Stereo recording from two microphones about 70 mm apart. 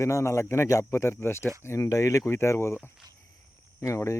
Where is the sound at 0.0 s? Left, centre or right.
Left.